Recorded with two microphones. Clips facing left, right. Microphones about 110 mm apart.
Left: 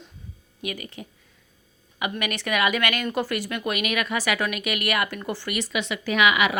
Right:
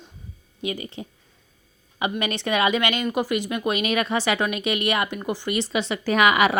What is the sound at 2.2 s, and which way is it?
Speech, 25° right (ahead or behind).